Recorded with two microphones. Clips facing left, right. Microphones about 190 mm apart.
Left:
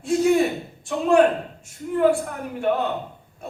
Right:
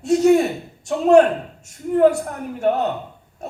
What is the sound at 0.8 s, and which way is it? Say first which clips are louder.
Speech: right 6 dB; 40° right (ahead or behind).